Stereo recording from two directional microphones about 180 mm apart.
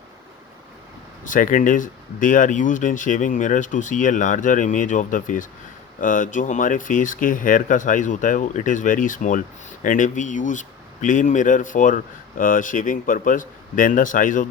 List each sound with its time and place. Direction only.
1.2 s speech: 45° left (ahead or behind)